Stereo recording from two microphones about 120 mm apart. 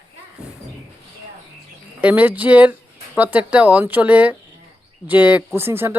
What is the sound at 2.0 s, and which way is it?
Speech, 15° right (ahead or behind).